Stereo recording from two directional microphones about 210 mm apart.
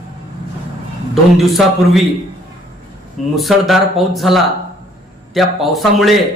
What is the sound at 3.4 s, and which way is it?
Speech, centre (ahead or behind).